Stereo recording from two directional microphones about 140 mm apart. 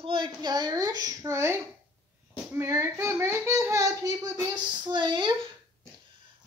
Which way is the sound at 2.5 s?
20° right (ahead or behind).